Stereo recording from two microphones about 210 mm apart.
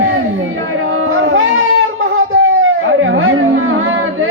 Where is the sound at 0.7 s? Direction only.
70° right (ahead or behind).